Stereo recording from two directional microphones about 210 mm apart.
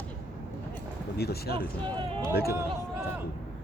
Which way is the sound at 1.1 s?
50° left (ahead or behind).